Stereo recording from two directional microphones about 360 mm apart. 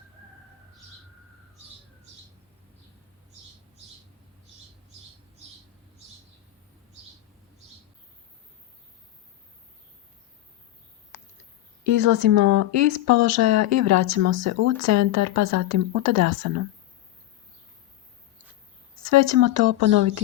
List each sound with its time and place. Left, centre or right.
11.8 s speech: right
19.1 s speech: right